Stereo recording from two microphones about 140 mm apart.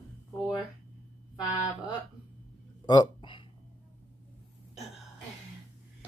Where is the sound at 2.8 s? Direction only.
30° left (ahead or behind).